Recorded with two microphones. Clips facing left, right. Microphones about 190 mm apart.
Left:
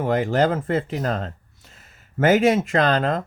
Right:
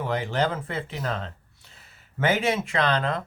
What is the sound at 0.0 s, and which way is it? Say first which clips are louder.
Speech: left 6 dB; 45° left (ahead or behind).